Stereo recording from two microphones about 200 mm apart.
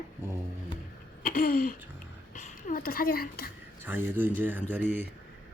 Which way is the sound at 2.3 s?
40° left (ahead or behind).